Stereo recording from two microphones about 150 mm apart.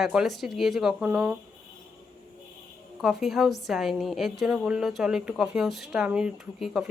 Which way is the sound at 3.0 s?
Centre (ahead or behind).